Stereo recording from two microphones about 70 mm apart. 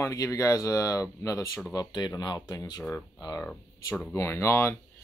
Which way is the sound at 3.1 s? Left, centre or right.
Left.